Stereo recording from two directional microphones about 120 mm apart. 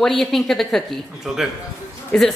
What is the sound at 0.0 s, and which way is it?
A woman's voice, centre (ahead or behind).